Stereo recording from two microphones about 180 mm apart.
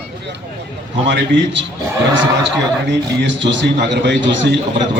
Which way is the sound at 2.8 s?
80° right.